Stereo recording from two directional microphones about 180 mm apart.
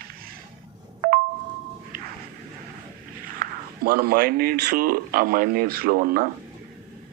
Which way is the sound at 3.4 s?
55° right (ahead or behind).